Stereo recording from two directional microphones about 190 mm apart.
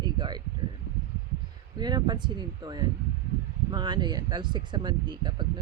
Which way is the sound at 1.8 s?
20° right (ahead or behind).